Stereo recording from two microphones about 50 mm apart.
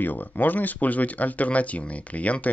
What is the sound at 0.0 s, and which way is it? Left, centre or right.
Speech, left.